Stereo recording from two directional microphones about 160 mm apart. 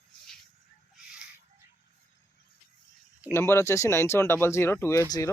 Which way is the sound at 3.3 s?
15° left (ahead or behind).